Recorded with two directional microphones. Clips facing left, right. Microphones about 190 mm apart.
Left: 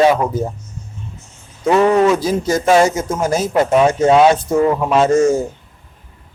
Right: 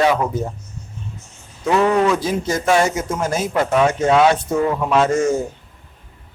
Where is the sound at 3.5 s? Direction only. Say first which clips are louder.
Left 4 dB; 25° left (ahead or behind).